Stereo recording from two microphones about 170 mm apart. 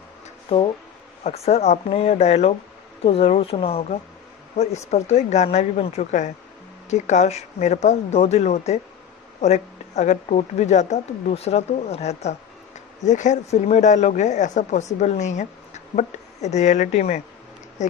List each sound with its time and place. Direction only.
1.2 s speech: 40° left (ahead or behind)